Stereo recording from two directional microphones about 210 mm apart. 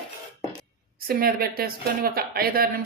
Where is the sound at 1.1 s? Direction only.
45° right (ahead or behind).